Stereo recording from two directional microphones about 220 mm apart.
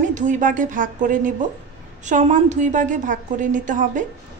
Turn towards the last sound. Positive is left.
turn(degrees=-35)  # may be behind; listen again after turning